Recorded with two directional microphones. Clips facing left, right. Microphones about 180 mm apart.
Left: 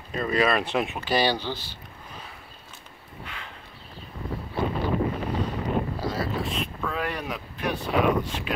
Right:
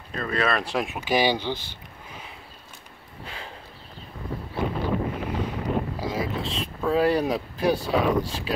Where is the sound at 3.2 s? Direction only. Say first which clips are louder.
Right 4 dB; 35° right (ahead or behind).